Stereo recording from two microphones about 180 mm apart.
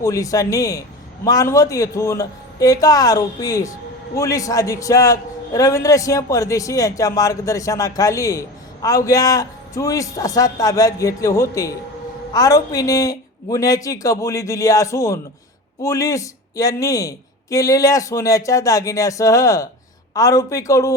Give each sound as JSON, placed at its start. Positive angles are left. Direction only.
{"t": 0.0, "sound": "a man's voice", "side_deg": 20}